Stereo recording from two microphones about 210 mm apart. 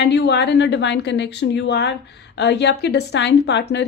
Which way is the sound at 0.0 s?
50° left (ahead or behind).